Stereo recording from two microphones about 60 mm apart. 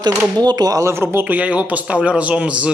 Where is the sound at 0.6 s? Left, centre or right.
Right.